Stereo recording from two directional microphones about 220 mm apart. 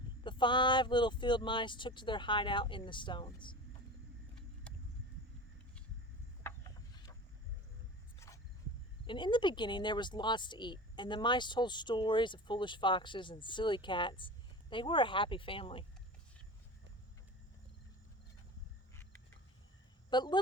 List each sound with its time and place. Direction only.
0.3 s speech: 20° left (ahead or behind)
9.0 s speech: 20° left (ahead or behind)
20.1 s speech: 20° left (ahead or behind)